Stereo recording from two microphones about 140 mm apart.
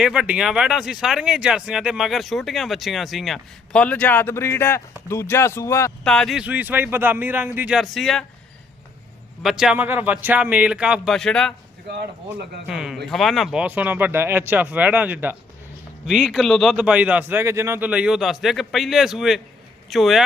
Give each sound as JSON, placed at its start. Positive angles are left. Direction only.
{"t": 0.0, "sound": "speech", "side_deg": -5}
{"t": 6.1, "sound": "speech", "side_deg": 5}
{"t": 9.4, "sound": "speech", "side_deg": -5}